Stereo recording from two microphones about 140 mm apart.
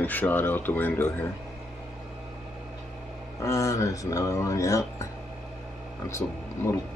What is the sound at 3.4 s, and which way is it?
Speech, 20° left (ahead or behind).